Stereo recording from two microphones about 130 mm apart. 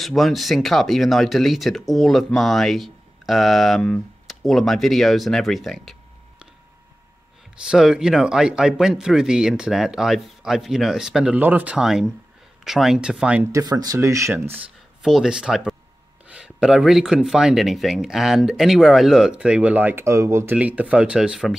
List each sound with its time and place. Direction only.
0.0 s speech: centre (ahead or behind)
7.6 s speech: 5° right (ahead or behind)
13.5 s speech: 25° right (ahead or behind)
15.0 s speech: 5° right (ahead or behind)